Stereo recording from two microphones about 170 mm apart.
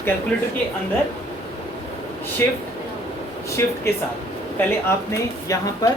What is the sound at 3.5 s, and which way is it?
Speech, 15° left (ahead or behind).